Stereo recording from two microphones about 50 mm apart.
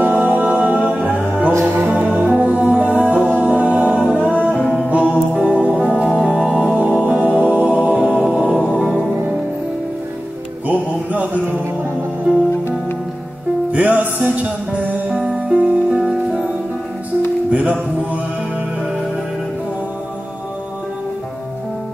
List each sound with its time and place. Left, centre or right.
0.1 s music: right
4.5 s music: left
4.9 s music: right
7.7 s a capella: right
8.3 s music: right
10.7 s music: right
13.7 s music: right
17.5 s music: right